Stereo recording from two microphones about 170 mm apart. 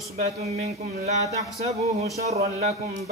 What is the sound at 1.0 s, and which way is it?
Speech, 40° right (ahead or behind).